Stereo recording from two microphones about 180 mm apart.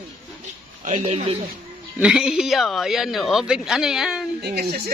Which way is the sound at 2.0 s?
5° right (ahead or behind).